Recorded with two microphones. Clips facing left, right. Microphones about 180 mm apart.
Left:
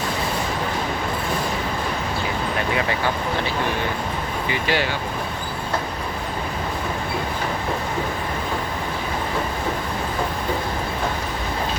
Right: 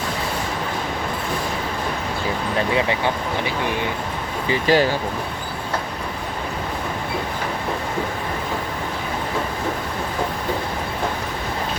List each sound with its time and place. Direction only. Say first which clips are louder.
4.4 s speech: right 7 dB; 40° right (ahead or behind)